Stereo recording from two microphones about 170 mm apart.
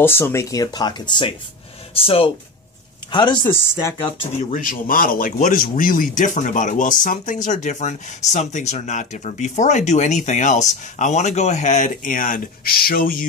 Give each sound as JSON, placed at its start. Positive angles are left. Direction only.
{"t": 0.0, "sound": "speech", "side_deg": 15}
{"t": 4.0, "sound": "speech", "side_deg": 40}